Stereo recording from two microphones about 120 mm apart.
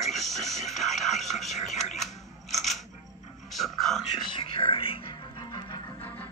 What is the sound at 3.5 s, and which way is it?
Music, centre (ahead or behind).